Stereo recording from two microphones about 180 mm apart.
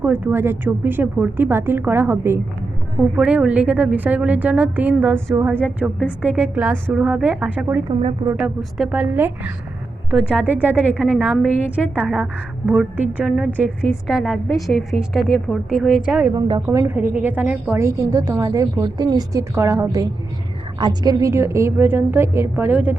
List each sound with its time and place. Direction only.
0.0 s a woman's voice: 10° right (ahead or behind)
7.9 s speech: 30° right (ahead or behind)
8.3 s a woman's voice: 10° right (ahead or behind)
16.6 s a woman's voice: 15° right (ahead or behind)